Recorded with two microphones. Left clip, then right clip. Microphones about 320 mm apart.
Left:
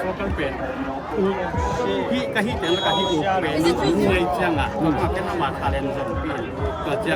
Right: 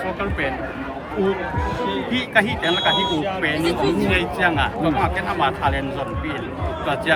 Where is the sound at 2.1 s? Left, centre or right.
Centre.